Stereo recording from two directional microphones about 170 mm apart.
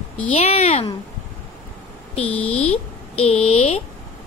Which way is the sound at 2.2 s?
5° left (ahead or behind).